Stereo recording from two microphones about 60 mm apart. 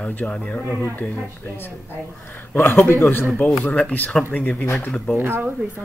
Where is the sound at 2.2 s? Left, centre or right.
Left.